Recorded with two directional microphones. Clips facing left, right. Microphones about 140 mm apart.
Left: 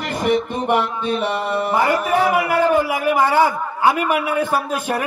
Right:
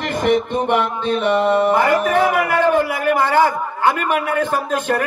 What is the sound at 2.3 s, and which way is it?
A man's voice, 10° left (ahead or behind).